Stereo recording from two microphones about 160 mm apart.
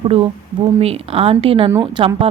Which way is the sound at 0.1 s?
35° right (ahead or behind).